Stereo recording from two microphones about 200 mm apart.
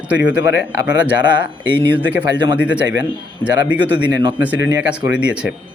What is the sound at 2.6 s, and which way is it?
Speech, 5° right (ahead or behind).